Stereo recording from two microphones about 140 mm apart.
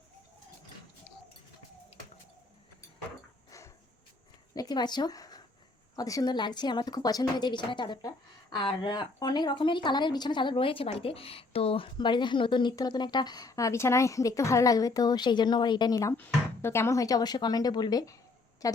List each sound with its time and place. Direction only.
4.5 s speech: 30° left (ahead or behind)
16.1 s a woman's voice: 15° left (ahead or behind)